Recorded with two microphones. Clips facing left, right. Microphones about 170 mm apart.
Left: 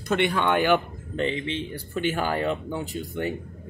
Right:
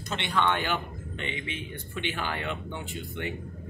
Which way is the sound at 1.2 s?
35° left (ahead or behind).